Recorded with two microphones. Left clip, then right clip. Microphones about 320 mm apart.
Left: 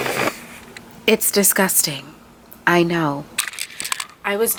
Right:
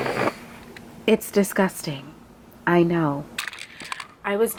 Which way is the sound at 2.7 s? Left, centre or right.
Centre.